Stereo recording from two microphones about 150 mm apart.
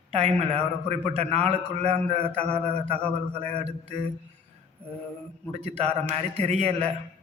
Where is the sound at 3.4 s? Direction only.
45° right (ahead or behind).